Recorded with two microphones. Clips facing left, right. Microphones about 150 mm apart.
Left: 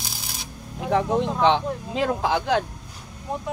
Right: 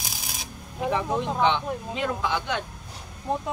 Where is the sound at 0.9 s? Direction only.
80° left.